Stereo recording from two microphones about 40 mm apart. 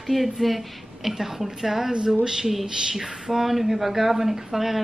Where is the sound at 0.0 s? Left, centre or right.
Centre.